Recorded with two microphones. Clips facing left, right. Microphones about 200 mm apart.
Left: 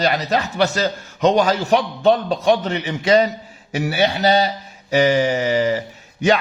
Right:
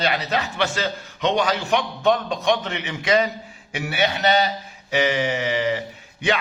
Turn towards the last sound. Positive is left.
turn(degrees=40)  # may be behind; listen again after turning